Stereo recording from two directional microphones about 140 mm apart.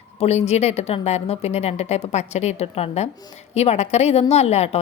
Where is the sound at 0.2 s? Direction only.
50° left (ahead or behind).